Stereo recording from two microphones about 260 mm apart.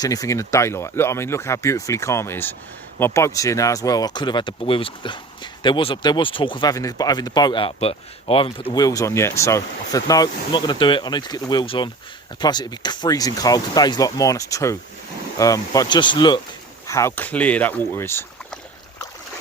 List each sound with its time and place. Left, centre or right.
0.0 s speech: centre